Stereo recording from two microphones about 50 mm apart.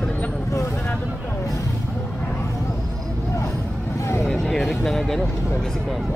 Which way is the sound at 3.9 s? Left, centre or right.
Left.